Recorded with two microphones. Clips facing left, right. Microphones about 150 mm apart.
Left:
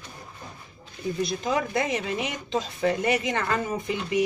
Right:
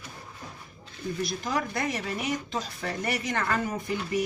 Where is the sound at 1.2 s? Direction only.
20° left (ahead or behind).